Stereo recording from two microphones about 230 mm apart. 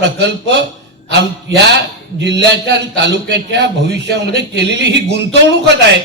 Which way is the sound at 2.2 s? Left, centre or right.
Right.